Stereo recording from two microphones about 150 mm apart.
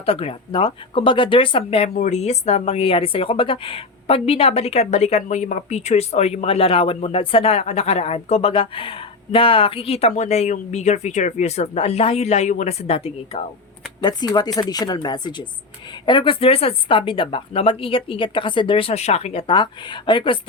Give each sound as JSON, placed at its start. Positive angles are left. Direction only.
{"t": 0.0, "sound": "speech", "side_deg": 40}
{"t": 2.0, "sound": "speech", "side_deg": 50}
{"t": 14.0, "sound": "a woman's voice", "side_deg": 30}